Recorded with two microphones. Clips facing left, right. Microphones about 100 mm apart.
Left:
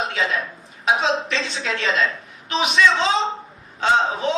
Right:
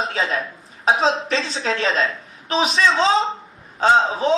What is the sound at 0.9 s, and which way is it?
A man's voice, 35° right (ahead or behind).